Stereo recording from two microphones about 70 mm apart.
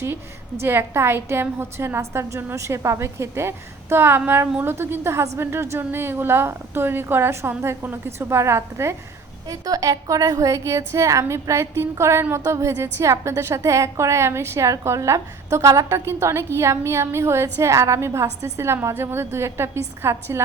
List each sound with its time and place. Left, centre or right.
0.6 s a woman's voice: right
9.5 s a woman's voice: right